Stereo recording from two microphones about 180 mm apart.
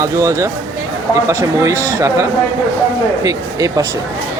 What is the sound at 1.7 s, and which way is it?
Speech, 10° left (ahead or behind).